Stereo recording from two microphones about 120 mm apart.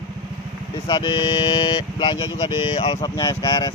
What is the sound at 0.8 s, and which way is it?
Speech, 40° left (ahead or behind).